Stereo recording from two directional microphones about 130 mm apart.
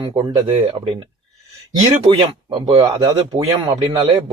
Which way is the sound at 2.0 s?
35° right (ahead or behind).